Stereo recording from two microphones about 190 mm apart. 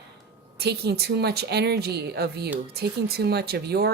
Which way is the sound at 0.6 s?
60° right (ahead or behind).